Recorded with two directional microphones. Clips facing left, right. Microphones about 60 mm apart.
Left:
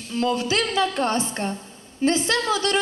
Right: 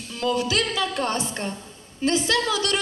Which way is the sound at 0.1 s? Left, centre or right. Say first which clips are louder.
Left 1 dB; left.